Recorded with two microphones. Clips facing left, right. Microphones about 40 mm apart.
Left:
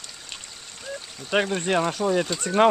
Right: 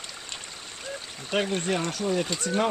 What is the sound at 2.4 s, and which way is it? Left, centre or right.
Speech, left.